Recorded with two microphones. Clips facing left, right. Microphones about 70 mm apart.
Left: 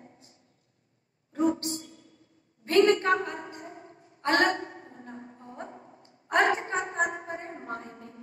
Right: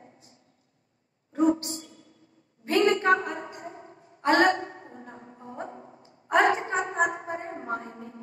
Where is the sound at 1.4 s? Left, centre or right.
Right.